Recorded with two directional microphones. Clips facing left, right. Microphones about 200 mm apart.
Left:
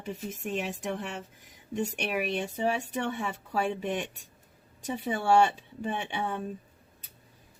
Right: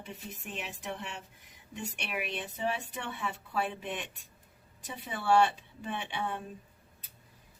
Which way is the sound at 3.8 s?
40° left (ahead or behind).